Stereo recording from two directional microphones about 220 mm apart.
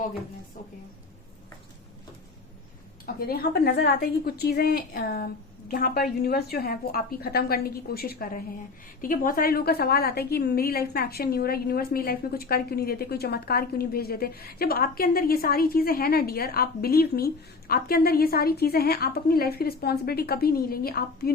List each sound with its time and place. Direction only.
3.2 s a woman's voice: 45° left (ahead or behind)